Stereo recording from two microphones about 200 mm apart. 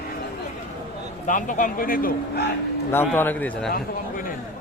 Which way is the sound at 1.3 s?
40° left (ahead or behind).